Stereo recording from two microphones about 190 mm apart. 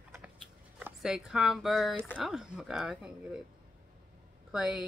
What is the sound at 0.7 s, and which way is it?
Speech, 5° right (ahead or behind).